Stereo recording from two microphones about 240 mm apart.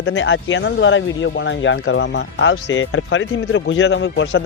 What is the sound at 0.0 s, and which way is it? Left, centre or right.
Speech, left.